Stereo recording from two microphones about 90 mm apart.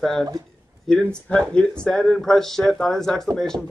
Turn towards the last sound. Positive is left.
turn(degrees=5)  # may be behind; listen again after turning